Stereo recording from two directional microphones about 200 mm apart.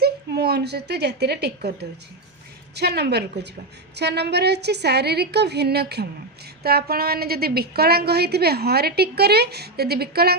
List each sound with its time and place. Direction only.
0.0 s a woman's voice: 55° right (ahead or behind)